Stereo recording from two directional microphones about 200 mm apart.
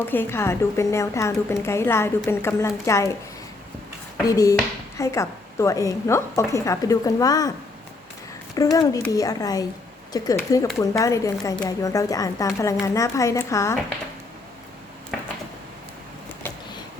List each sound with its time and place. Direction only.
0.1 s a woman's voice: 10° left (ahead or behind)
4.2 s a woman's voice: 15° left (ahead or behind)
8.5 s a woman's voice: 15° left (ahead or behind)